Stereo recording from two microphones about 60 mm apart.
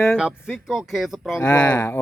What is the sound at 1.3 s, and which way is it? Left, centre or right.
Speech, left.